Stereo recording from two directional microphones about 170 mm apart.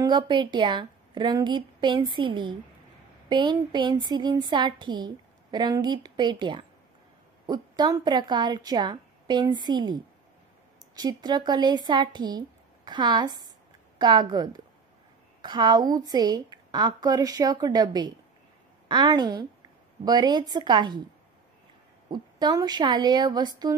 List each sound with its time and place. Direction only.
0.0 s a woman's voice: 25° right (ahead or behind)
22.1 s a woman's voice: 25° right (ahead or behind)